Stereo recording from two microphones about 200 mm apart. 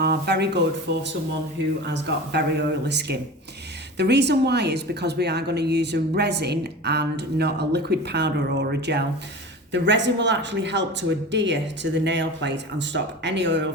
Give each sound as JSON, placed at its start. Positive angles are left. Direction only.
{"t": 0.0, "sound": "speech", "side_deg": -55}
{"t": 1.9, "sound": "a woman's voice", "side_deg": -55}